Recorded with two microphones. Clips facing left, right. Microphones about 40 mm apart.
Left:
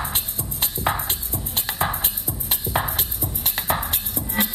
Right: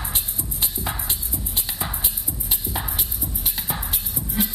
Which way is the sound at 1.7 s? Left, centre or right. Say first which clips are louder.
Left 9 dB; left.